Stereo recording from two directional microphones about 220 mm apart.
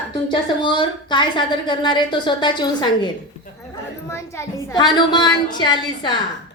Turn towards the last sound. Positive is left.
turn(degrees=20)  # may be behind; listen again after turning